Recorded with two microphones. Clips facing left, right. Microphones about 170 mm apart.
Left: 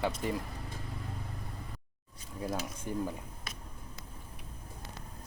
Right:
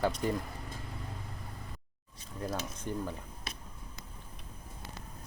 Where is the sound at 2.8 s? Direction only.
10° left (ahead or behind).